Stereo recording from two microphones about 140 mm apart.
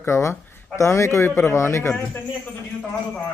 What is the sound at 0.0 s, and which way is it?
Speech, 20° left (ahead or behind).